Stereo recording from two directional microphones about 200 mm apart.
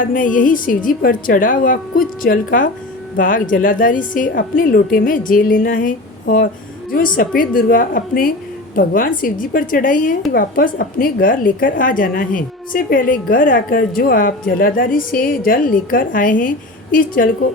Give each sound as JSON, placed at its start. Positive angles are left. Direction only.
{"t": 0.0, "sound": "a woman's voice", "side_deg": 40}